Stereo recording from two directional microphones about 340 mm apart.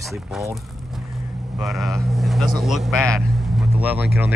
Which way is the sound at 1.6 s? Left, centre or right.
Centre.